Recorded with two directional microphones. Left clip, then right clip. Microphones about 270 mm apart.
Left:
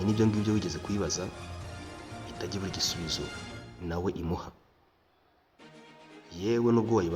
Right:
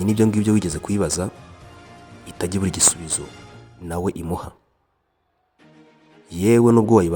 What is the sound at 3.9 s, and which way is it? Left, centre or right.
Speech, right.